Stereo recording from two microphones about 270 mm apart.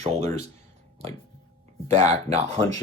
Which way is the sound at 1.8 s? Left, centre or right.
Right.